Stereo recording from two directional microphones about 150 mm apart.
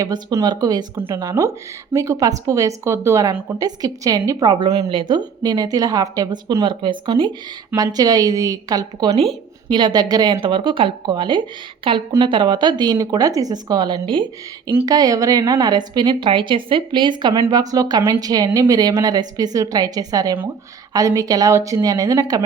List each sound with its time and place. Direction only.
0.0 s a woman's voice: 25° right (ahead or behind)
14.7 s speech: 20° right (ahead or behind)